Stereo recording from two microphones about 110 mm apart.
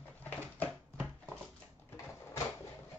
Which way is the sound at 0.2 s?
15° left (ahead or behind).